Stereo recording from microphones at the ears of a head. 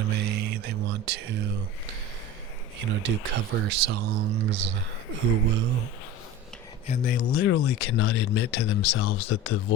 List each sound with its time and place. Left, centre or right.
0.0 s a sound: right
2.7 s speech: right
6.8 s speech: left